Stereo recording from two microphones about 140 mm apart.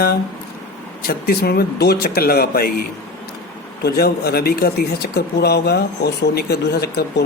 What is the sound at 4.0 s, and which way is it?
Speech, 90° left.